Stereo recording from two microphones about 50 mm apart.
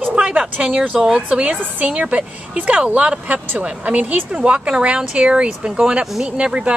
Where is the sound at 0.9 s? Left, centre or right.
Centre.